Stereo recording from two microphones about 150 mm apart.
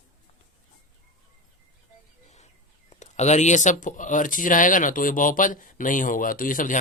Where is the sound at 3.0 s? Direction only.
50° left (ahead or behind).